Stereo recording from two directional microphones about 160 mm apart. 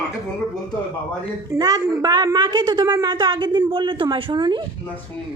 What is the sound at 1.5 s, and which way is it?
A woman's voice, 25° right (ahead or behind).